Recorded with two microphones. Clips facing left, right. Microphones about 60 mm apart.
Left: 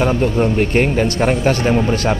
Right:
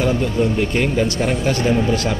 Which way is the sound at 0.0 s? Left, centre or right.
Left.